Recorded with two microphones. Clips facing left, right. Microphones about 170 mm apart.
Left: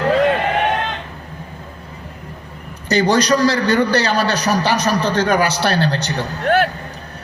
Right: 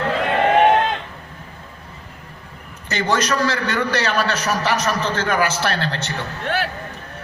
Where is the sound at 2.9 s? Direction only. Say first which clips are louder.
Left 6 dB; 35° left (ahead or behind).